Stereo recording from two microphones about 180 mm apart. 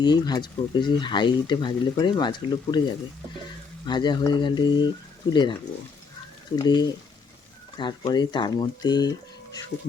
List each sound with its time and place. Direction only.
0.0 s speech: 25° left (ahead or behind)
3.8 s speech: 25° left (ahead or behind)
6.6 s speech: 25° left (ahead or behind)